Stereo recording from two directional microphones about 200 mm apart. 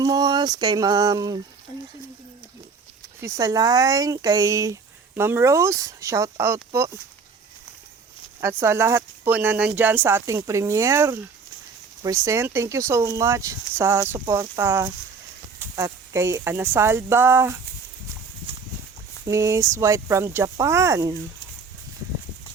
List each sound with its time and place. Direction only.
0.0 s a sound: 20° right (ahead or behind)
3.2 s speech: 15° right (ahead or behind)
8.4 s speech: 15° right (ahead or behind)
19.3 s speech: 15° right (ahead or behind)